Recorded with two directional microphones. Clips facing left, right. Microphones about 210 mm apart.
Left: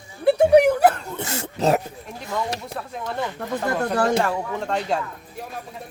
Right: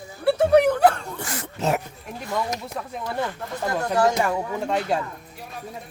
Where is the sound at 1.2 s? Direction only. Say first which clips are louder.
Left 4 dB; 25° left (ahead or behind).